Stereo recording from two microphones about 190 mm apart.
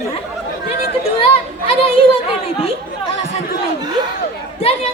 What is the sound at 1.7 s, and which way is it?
Speech, 30° left (ahead or behind).